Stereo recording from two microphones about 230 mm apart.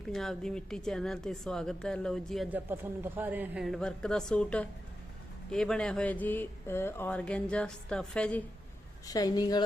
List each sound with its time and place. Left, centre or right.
0.1 s speech: centre
9.0 s a woman's voice: centre